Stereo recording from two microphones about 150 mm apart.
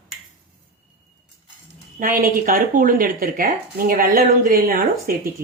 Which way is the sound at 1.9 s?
65° right (ahead or behind).